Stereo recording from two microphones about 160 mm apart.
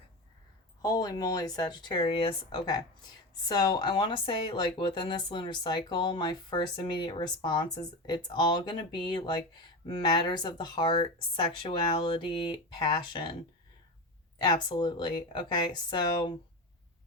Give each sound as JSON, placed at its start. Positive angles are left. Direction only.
{"t": 0.8, "sound": "speech", "side_deg": 25}
{"t": 14.3, "sound": "speech", "side_deg": 25}